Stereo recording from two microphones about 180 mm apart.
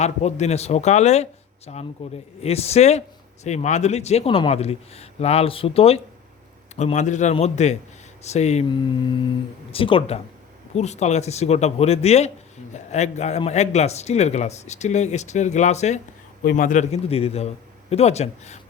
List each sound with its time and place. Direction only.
0.0 s a man's voice: 40° left (ahead or behind)
16.4 s a man's voice: 50° left (ahead or behind)